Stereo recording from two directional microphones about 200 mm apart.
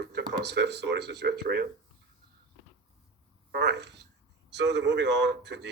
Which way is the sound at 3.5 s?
55° right (ahead or behind).